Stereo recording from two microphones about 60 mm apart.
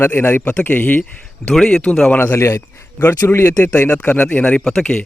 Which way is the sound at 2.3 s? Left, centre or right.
Left.